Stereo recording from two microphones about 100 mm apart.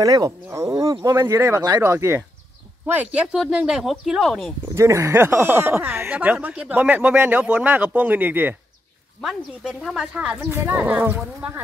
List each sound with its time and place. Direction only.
0.0 s speech: 35° right (ahead or behind)
2.9 s speech: 15° right (ahead or behind)
4.7 s speech: 30° right (ahead or behind)
9.2 s speech: 5° right (ahead or behind)
10.1 s speech: 15° right (ahead or behind)